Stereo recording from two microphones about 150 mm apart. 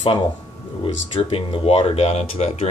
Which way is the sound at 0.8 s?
35° left (ahead or behind).